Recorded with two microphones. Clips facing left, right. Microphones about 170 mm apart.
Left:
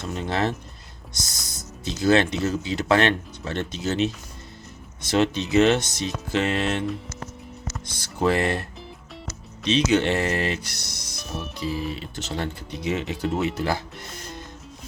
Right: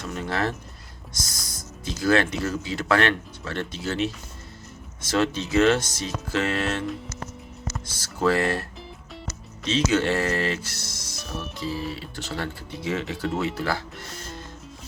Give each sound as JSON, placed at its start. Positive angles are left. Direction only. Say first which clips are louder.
{"t": 0.1, "sound": "speech", "louder": "left 2 dB", "side_deg": 20}
{"t": 7.9, "sound": "speech", "louder": "even", "side_deg": 20}
{"t": 9.6, "sound": "speech", "louder": "left 2 dB", "side_deg": 20}